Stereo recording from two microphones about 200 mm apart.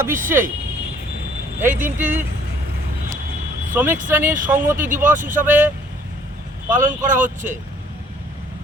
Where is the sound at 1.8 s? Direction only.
40° right (ahead or behind).